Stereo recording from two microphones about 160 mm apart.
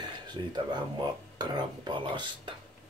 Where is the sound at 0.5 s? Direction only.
25° right (ahead or behind).